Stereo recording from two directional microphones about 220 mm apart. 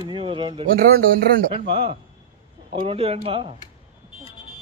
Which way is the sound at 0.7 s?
45° right (ahead or behind).